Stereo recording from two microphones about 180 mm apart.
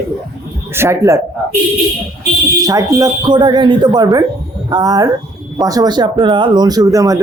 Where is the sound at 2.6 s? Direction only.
20° right (ahead or behind).